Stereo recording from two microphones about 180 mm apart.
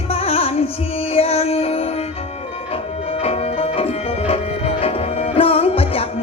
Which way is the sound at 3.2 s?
35° left (ahead or behind).